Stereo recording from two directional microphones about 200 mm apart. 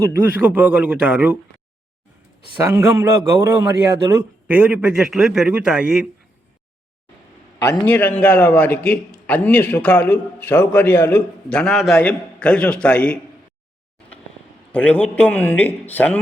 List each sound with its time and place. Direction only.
0.0 s a man's voice: 10° right (ahead or behind)
2.6 s a man's voice: 15° right (ahead or behind)
7.7 s a man's voice: 10° left (ahead or behind)
14.7 s a man's voice: 5° left (ahead or behind)